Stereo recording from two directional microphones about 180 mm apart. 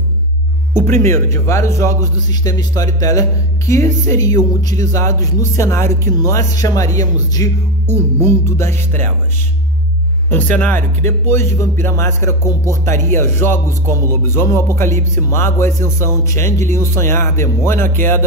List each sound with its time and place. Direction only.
0.7 s speech: 15° left (ahead or behind)
10.3 s speech: 10° left (ahead or behind)